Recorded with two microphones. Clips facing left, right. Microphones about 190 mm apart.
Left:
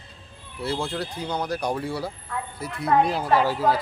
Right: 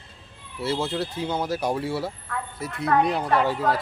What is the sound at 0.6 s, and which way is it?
Speech, 5° right (ahead or behind).